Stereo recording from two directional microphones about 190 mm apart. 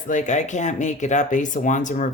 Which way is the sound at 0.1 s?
40° left (ahead or behind).